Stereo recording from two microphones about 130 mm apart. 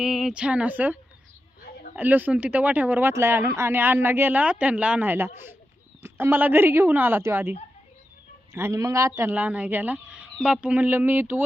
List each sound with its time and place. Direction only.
0.0 s speech: 5° right (ahead or behind)
2.0 s speech: 15° right (ahead or behind)
8.5 s speech: 20° right (ahead or behind)